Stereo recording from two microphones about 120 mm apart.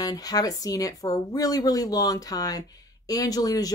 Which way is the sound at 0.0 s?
30° left (ahead or behind).